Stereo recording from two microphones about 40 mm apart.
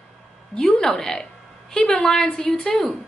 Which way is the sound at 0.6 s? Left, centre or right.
Centre.